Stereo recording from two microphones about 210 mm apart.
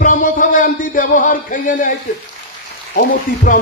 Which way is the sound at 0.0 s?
40° left (ahead or behind).